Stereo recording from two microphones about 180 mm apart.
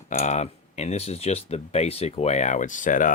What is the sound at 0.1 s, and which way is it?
Speech, 40° left (ahead or behind).